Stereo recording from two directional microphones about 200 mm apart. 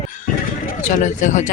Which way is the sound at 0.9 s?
35° left (ahead or behind).